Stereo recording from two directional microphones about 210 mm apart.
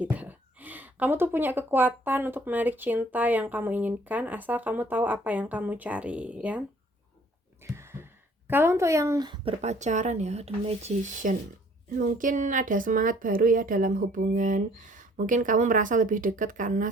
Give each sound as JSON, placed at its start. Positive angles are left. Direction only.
{"t": 0.0, "sound": "speech", "side_deg": -5}
{"t": 7.6, "sound": "a sound", "side_deg": -10}
{"t": 8.4, "sound": "a woman's voice", "side_deg": -10}